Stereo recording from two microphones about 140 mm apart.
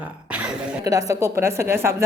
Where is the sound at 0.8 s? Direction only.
25° right (ahead or behind).